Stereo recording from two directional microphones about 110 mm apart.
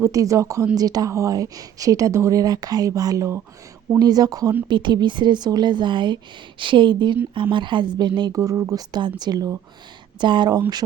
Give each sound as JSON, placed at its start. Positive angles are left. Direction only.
{"t": 0.0, "sound": "a woman's voice", "side_deg": -30}
{"t": 8.4, "sound": "a woman's voice", "side_deg": -30}